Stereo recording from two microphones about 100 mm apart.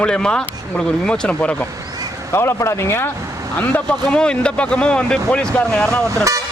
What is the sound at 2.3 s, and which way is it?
Speech, 25° left (ahead or behind).